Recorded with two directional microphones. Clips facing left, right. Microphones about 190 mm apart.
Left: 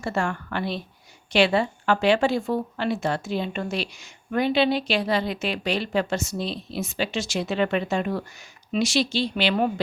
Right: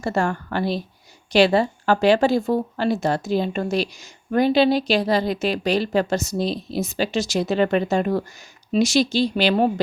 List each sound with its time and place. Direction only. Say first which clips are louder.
0.0 s speech: right 4 dB; 40° right (ahead or behind)